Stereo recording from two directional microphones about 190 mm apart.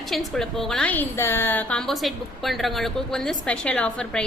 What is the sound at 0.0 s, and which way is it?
A woman's voice, centre (ahead or behind).